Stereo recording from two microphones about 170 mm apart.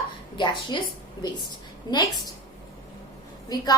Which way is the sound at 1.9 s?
25° left (ahead or behind).